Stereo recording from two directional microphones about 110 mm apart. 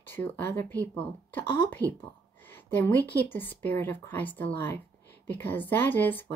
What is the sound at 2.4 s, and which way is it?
A woman's voice, 20° left (ahead or behind).